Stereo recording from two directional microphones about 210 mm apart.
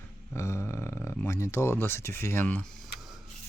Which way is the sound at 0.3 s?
15° left (ahead or behind).